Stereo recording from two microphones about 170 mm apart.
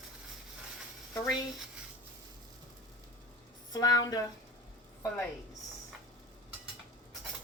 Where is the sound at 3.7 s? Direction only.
20° left (ahead or behind).